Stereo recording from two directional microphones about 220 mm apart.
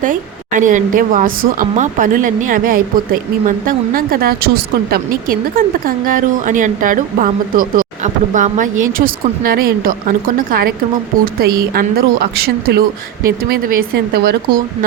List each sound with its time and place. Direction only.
0.0 s speech: 35° right (ahead or behind)